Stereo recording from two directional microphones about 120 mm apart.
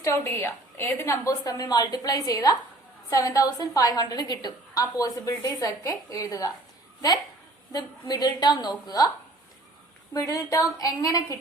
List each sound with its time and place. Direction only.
0.0 s a woman's voice: 25° left (ahead or behind)
7.7 s a woman's voice: 35° left (ahead or behind)
10.2 s a woman's voice: 25° left (ahead or behind)